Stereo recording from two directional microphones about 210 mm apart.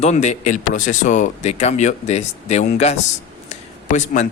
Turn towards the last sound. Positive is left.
turn(degrees=35)  # may be behind; listen again after turning